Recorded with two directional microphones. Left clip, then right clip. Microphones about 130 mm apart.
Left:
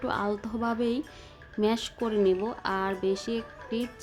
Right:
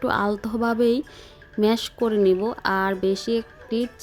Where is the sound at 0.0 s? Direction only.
50° right (ahead or behind).